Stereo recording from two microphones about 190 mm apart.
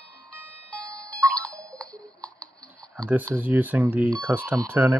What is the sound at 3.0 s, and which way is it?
Speech, 10° right (ahead or behind).